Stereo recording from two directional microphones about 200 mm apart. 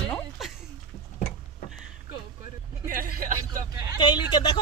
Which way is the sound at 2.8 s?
45° right (ahead or behind).